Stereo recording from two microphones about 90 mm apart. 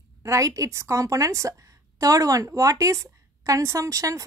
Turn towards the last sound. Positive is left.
turn(degrees=-40)  # may be behind; listen again after turning